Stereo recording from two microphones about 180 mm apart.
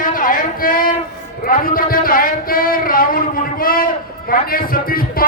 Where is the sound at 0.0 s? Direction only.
50° left (ahead or behind).